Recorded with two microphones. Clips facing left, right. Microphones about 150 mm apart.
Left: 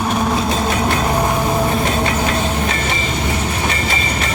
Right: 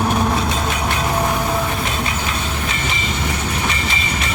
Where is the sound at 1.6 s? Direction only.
40° left (ahead or behind).